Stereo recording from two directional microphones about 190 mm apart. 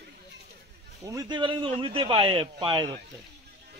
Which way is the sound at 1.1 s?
20° right (ahead or behind).